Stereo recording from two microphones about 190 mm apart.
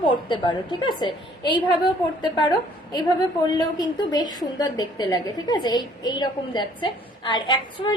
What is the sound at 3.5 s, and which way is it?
A woman's voice, 20° left (ahead or behind).